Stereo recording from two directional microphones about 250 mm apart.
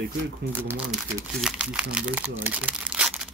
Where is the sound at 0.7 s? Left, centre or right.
Centre.